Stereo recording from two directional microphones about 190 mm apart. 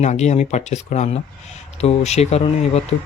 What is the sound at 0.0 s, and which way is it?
Speech, 35° left (ahead or behind).